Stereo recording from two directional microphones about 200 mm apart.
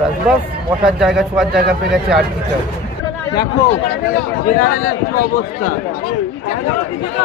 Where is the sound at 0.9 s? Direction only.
5° right (ahead or behind).